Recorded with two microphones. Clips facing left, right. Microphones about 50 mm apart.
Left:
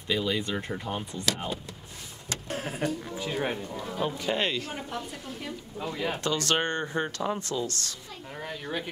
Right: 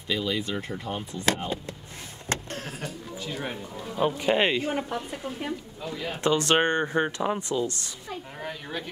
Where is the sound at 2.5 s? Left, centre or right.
Centre.